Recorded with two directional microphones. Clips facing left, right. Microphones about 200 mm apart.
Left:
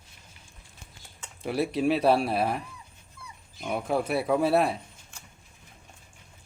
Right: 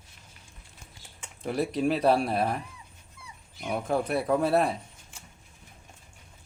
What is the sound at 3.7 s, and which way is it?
Speech, centre (ahead or behind).